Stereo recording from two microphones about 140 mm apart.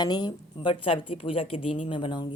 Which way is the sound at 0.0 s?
30° left (ahead or behind).